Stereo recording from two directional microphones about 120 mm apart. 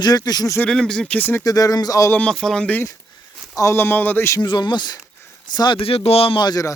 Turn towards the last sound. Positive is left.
turn(degrees=30)  # may be behind; listen again after turning